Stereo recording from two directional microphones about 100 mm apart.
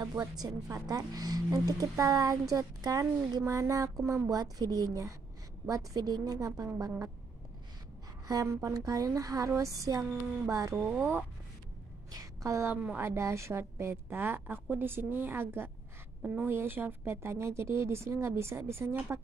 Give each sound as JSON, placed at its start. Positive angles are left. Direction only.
{"t": 0.0, "sound": "a woman's voice", "side_deg": -40}
{"t": 8.3, "sound": "a woman's voice", "side_deg": -35}
{"t": 10.8, "sound": "speech", "side_deg": -15}
{"t": 12.1, "sound": "a sound", "side_deg": -35}
{"t": 13.0, "sound": "speech", "side_deg": -25}